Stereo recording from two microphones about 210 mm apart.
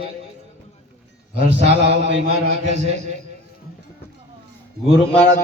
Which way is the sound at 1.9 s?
55° right (ahead or behind).